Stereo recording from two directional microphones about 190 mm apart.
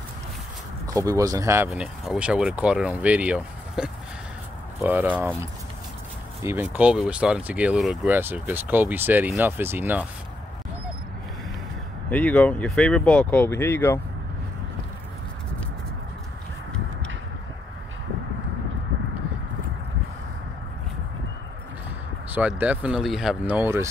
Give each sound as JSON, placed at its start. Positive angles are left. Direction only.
{"t": 0.8, "sound": "speech", "side_deg": -15}
{"t": 1.7, "sound": "speech", "side_deg": -5}
{"t": 6.4, "sound": "speech", "side_deg": -10}
{"t": 12.1, "sound": "speech", "side_deg": 10}
{"t": 22.3, "sound": "speech", "side_deg": -10}